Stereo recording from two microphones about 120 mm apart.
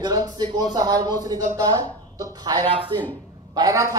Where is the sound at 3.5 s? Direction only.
30° right (ahead or behind).